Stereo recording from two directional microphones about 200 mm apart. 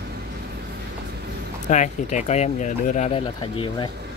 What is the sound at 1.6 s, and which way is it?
Speech, 35° left (ahead or behind).